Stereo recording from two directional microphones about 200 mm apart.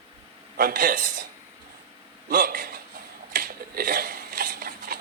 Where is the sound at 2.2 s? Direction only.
45° right (ahead or behind).